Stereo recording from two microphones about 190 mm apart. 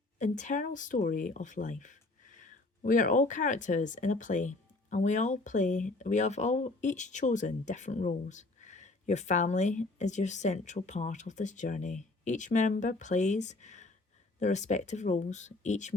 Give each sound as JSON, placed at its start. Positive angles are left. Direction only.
{"t": 0.2, "sound": "speech", "side_deg": 40}